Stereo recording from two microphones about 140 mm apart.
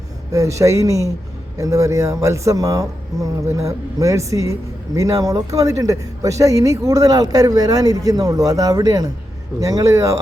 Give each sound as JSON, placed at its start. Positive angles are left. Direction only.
{"t": 0.3, "sound": "speech", "side_deg": -25}